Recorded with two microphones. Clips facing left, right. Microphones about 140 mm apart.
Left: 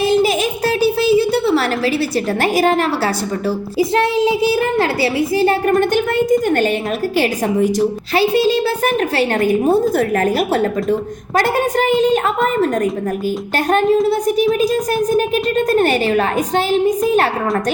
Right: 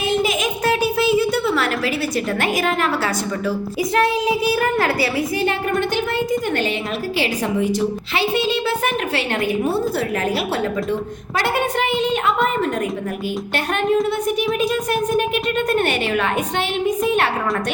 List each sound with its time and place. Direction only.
0.0 s a sound: 35° left (ahead or behind)
2.4 s a woman's voice: 35° left (ahead or behind)
5.9 s a woman's voice: 50° left (ahead or behind)
13.7 s a woman's voice: 40° left (ahead or behind)